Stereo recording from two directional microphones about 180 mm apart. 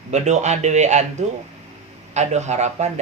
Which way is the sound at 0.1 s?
40° right (ahead or behind).